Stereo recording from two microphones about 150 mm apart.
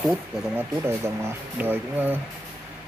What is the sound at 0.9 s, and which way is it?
Speech, 15° right (ahead or behind).